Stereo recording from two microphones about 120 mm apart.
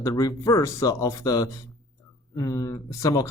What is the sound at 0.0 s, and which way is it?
Speech, 30° left (ahead or behind).